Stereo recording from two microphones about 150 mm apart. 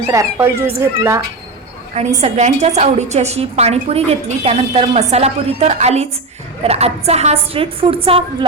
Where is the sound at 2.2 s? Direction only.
45° right (ahead or behind).